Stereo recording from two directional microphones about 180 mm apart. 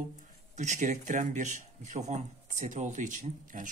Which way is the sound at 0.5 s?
40° right (ahead or behind).